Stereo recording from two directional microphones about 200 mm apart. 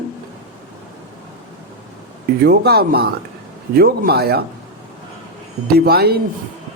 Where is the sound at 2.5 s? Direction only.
50° right (ahead or behind).